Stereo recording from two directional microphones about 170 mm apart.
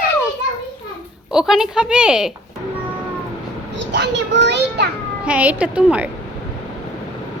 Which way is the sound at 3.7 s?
90° right.